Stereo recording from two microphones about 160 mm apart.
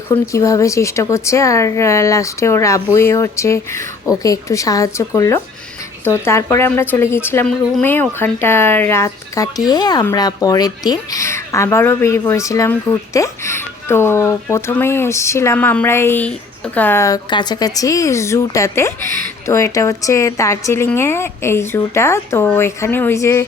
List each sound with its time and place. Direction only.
0.1 s a woman's voice: 20° left (ahead or behind)